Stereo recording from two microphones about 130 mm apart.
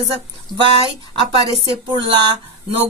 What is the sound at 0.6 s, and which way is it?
Speech, 45° right (ahead or behind).